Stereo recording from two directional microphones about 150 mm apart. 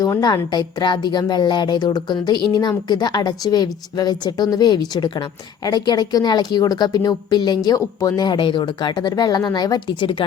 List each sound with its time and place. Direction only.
0.0 s a woman's voice: 25° left (ahead or behind)